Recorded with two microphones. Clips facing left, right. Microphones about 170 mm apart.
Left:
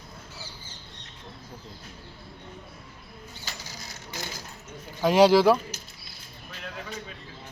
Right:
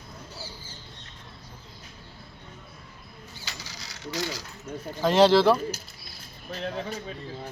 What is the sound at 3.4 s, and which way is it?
Mechanisms, 50° left (ahead or behind).